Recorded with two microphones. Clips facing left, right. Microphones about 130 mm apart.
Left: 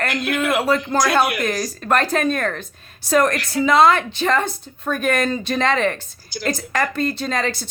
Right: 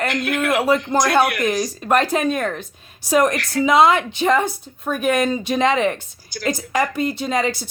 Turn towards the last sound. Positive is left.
turn(degrees=-15)  # may be behind; listen again after turning